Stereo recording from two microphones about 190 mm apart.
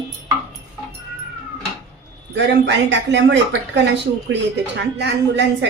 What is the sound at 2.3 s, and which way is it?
A woman's voice, 65° right (ahead or behind).